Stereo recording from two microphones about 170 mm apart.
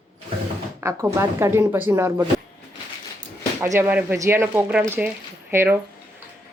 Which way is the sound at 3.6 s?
15° right (ahead or behind).